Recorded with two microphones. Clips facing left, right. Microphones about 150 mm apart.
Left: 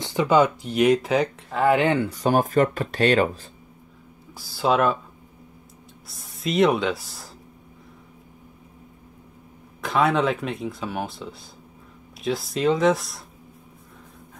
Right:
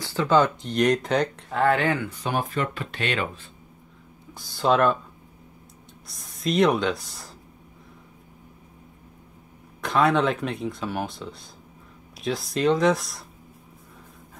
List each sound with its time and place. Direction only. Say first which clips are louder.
0.0 s speech: left 2 dB; 15° left (ahead or behind)
1.7 s speech: left 5 dB; 20° left (ahead or behind)
2.0 s speech: left 7 dB; 40° left (ahead or behind)
4.3 s speech: even; 5° left (ahead or behind)
6.0 s speech: right 1 dB; centre (ahead or behind)
9.8 s speech: even; centre (ahead or behind)